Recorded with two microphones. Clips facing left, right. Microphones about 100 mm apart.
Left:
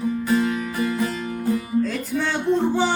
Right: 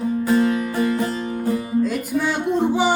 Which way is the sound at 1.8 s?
10° right (ahead or behind).